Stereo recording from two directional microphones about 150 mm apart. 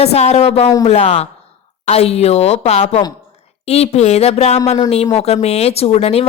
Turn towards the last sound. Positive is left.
turn(degrees=45)  # may be behind; listen again after turning